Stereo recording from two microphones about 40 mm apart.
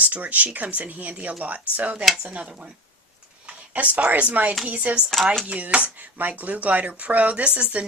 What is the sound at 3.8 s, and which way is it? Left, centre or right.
Speech, right.